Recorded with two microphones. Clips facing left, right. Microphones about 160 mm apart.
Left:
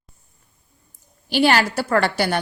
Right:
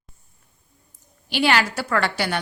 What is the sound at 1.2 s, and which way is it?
A woman's voice, 40° left (ahead or behind).